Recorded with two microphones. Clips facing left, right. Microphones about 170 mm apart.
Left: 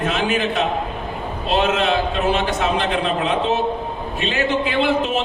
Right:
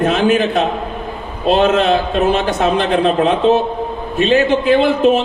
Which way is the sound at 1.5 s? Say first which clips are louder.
Right 6 dB; 40° right (ahead or behind).